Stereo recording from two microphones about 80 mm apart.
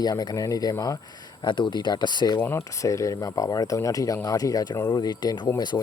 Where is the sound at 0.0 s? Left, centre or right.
Left.